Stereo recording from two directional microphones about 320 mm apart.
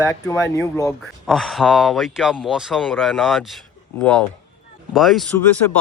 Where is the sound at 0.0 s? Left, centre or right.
Centre.